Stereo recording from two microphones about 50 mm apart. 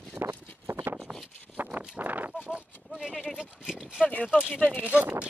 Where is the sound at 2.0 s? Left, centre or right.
Right.